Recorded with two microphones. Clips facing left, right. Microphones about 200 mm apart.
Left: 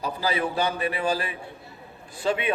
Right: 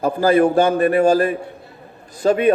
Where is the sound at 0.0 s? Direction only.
50° right (ahead or behind).